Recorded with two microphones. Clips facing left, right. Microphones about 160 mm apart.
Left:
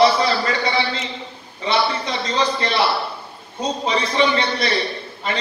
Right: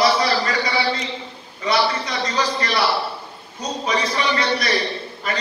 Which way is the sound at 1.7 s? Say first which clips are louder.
Even; 30° left (ahead or behind).